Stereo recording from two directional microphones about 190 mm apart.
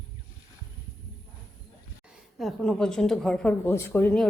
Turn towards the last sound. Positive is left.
turn(degrees=5)  # may be behind; listen again after turning